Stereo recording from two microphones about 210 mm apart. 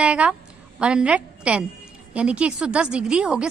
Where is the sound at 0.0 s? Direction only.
5° right (ahead or behind).